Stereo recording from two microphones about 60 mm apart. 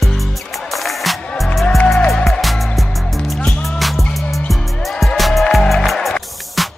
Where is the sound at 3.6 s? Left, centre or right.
Centre.